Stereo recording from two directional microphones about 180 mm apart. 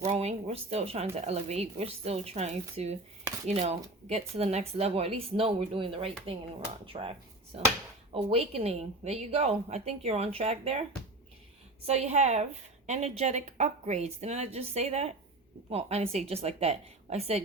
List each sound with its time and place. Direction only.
0.0 s a woman's voice: 35° right (ahead or behind)
11.9 s a woman's voice: 35° right (ahead or behind)